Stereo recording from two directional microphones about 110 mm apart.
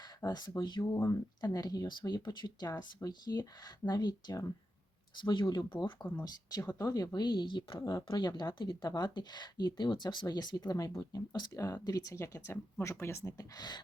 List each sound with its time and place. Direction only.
0.3 s speech: 40° left (ahead or behind)
5.2 s speech: 45° left (ahead or behind)
6.7 s speech: 35° left (ahead or behind)
13.2 s speech: 35° left (ahead or behind)